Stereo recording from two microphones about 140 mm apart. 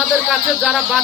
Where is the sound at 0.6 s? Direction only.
Centre (ahead or behind).